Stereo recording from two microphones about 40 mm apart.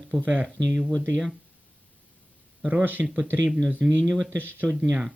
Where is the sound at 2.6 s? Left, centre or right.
Right.